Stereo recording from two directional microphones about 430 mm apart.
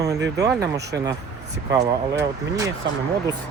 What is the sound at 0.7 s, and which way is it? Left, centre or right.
Speech, right.